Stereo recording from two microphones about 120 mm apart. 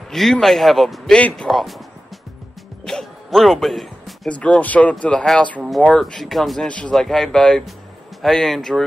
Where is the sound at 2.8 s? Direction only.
5° left (ahead or behind).